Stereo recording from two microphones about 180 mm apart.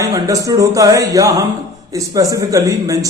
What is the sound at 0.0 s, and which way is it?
A man's voice, 20° right (ahead or behind).